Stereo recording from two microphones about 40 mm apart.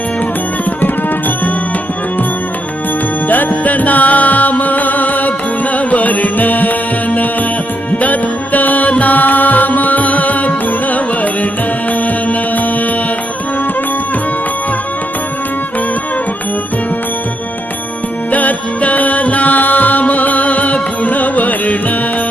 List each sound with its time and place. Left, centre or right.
3.2 s music: left
12.0 s music: left
18.3 s music: left